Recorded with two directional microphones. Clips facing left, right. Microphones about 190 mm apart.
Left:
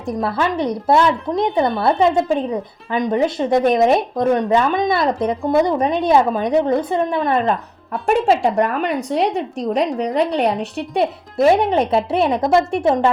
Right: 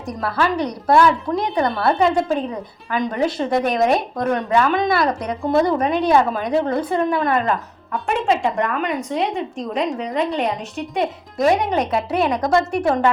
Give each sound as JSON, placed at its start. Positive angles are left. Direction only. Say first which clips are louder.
{"t": 0.0, "sound": "a woman's voice", "louder": "left 2 dB", "side_deg": 25}
{"t": 8.0, "sound": "a woman's voice", "louder": "left 4 dB", "side_deg": 35}